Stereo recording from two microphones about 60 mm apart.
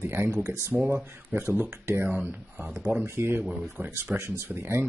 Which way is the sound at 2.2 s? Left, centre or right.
Right.